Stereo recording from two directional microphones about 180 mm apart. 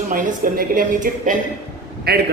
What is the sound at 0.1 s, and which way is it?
A man's voice, 50° right (ahead or behind).